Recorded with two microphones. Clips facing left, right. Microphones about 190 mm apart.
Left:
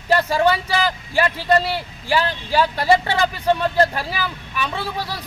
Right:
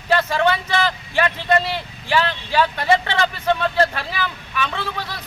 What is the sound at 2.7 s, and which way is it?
Speech, 35° left (ahead or behind).